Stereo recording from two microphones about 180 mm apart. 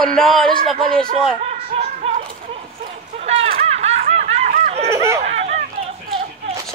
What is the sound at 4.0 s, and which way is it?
Laughter, 40° right (ahead or behind).